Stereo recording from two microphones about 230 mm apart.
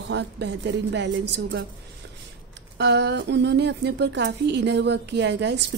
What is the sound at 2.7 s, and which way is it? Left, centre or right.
A woman's voice, right.